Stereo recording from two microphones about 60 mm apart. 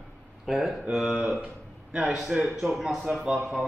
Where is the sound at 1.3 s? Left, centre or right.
Right.